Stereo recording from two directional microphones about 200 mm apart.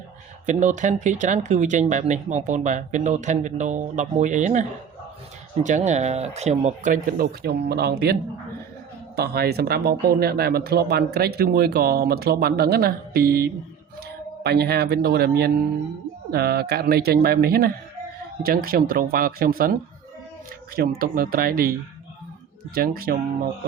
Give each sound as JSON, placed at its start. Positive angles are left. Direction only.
{"t": 0.4, "sound": "speech", "side_deg": -40}
{"t": 5.6, "sound": "speech", "side_deg": -35}
{"t": 20.7, "sound": "speech", "side_deg": -45}